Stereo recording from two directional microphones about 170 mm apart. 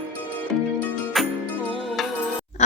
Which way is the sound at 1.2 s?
Centre (ahead or behind).